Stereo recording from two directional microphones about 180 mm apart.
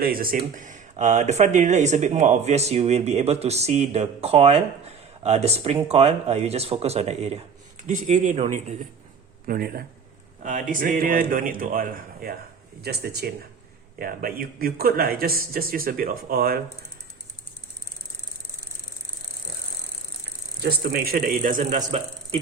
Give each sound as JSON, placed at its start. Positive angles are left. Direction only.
{"t": 0.0, "sound": "a man's voice", "side_deg": -55}
{"t": 9.5, "sound": "a man's voice", "side_deg": -55}
{"t": 20.6, "sound": "a man's voice", "side_deg": -60}